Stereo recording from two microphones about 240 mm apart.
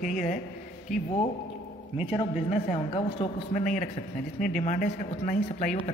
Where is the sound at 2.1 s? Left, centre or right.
Left.